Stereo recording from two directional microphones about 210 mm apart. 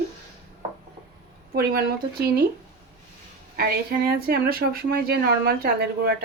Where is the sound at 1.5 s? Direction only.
45° right (ahead or behind).